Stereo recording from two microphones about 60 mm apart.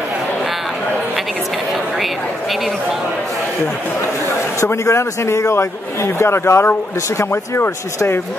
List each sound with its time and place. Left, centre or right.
4.6 s a man's voice: left